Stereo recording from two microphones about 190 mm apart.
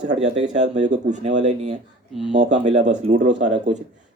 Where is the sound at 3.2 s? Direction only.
70° right (ahead or behind).